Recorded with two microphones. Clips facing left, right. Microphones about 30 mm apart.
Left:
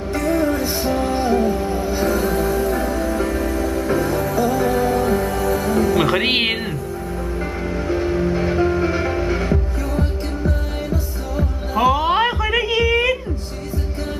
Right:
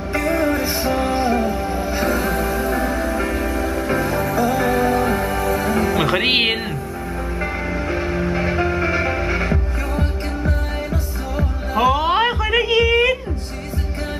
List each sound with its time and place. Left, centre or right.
0.1 s music: right
5.9 s music: centre
7.7 s music: centre
11.8 s a sound: centre